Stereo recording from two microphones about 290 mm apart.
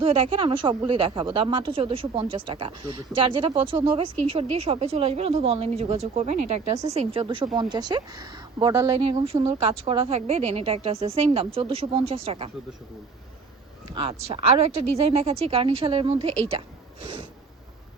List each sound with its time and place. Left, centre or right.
0.0 s speech: centre
13.9 s speech: centre